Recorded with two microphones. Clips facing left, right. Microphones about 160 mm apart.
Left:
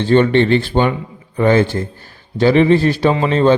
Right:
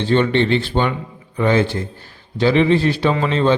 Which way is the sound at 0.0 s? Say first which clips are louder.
Left 4 dB; 45° left (ahead or behind).